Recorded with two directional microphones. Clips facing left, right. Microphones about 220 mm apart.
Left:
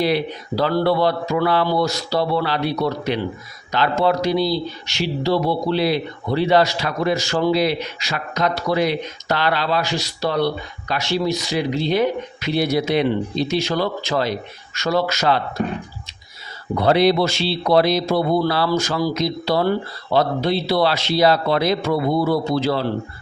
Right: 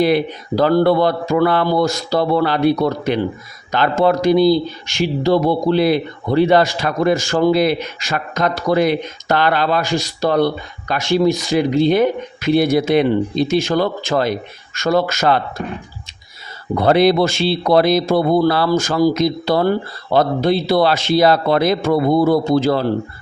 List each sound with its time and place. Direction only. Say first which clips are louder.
0.0 s speech: right 5 dB; 50° right (ahead or behind)
16.7 s speech: right 3 dB; 50° right (ahead or behind)